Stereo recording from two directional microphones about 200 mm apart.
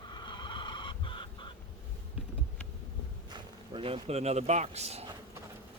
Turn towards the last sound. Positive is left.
turn(degrees=-30)  # may be behind; listen again after turning